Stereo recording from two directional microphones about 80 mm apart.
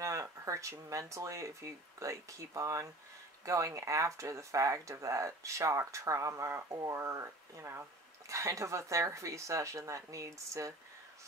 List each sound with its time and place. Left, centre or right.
0.0 s speech: right